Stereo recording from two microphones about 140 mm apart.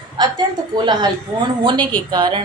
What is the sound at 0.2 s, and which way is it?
Speech, 30° right (ahead or behind).